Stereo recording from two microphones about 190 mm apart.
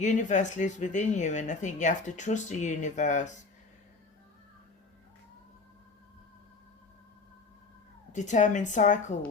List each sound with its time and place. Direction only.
0.0 s speech: 40° left (ahead or behind)
8.1 s speech: 40° left (ahead or behind)